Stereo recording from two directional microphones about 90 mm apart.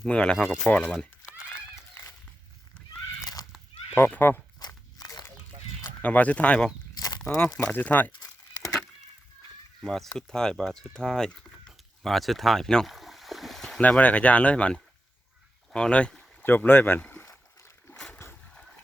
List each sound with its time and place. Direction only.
0.0 s speech: 10° left (ahead or behind)
3.4 s fowl: 40° left (ahead or behind)
3.9 s speech: 25° left (ahead or behind)
4.6 s a sound: 45° left (ahead or behind)
6.0 s speech: 15° left (ahead or behind)
6.9 s a sound: 50° left (ahead or behind)
7.6 s speech: 20° left (ahead or behind)
9.8 s speech: 5° left (ahead or behind)
13.8 s speech: 15° left (ahead or behind)
16.4 s speech: 25° left (ahead or behind)
18.1 s boat: 20° left (ahead or behind)